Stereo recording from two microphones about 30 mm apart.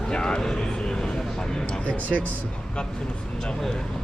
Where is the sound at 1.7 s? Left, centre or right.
Left.